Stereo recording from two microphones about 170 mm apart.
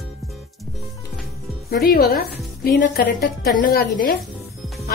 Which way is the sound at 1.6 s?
60° left (ahead or behind).